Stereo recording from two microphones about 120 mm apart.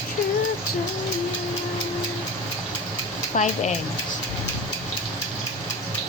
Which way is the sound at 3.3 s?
90° left.